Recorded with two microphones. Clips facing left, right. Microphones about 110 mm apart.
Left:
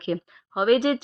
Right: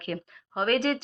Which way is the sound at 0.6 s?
15° left (ahead or behind).